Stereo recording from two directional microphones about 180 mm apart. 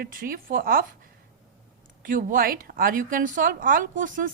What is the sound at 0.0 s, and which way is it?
Speech, 55° right (ahead or behind).